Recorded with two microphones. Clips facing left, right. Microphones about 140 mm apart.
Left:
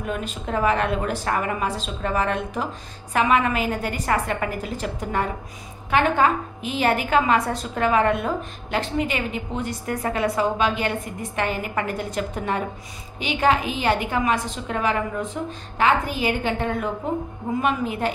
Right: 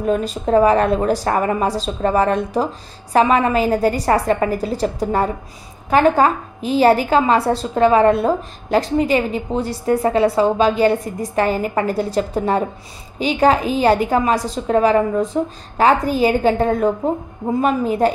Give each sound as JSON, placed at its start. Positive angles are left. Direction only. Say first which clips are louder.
{"t": 0.0, "sound": "a woman's voice", "louder": "right 10 dB", "side_deg": -35}